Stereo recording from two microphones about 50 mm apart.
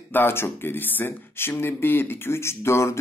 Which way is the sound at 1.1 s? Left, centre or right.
Left.